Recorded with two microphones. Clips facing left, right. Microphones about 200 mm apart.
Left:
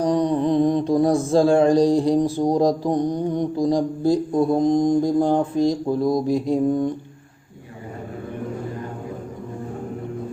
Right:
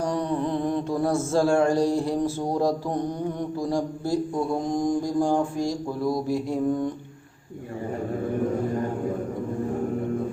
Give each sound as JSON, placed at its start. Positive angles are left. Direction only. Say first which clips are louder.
{"t": 0.0, "sound": "mantra", "louder": "left 6 dB", "side_deg": 15}